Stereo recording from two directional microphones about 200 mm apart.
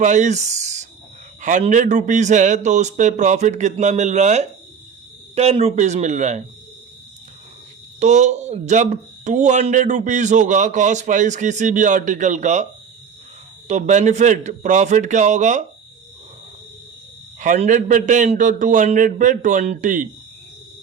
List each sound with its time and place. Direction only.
0.0 s speech: 35° right (ahead or behind)
7.9 s speech: 35° right (ahead or behind)
13.7 s speech: 35° right (ahead or behind)
17.4 s speech: 40° right (ahead or behind)